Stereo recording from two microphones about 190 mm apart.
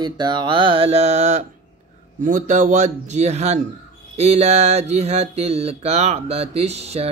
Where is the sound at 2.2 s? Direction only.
40° right (ahead or behind).